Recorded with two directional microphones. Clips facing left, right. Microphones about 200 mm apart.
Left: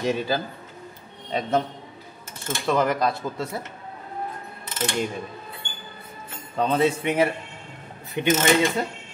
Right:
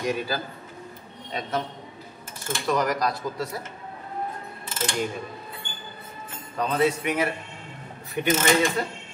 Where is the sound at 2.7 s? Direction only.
25° left (ahead or behind).